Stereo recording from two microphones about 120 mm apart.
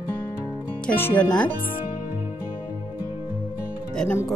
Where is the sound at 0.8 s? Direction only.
15° left (ahead or behind).